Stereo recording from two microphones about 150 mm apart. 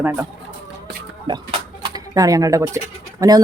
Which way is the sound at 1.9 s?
25° right (ahead or behind).